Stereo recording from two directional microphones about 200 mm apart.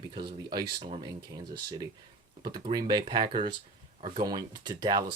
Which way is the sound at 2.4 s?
20° right (ahead or behind).